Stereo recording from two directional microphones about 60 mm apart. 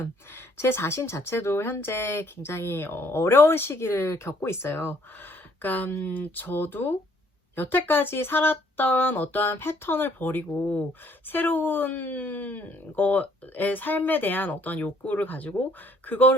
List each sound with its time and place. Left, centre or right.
0.0 s speech: left